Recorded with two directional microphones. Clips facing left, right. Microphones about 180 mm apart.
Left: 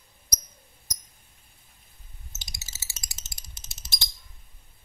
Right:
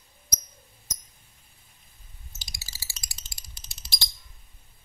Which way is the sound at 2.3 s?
20° left (ahead or behind).